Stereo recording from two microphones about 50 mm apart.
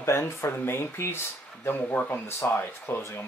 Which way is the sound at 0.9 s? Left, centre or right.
Left.